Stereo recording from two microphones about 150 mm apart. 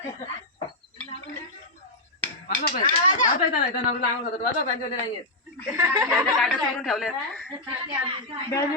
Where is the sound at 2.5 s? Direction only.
70° left (ahead or behind).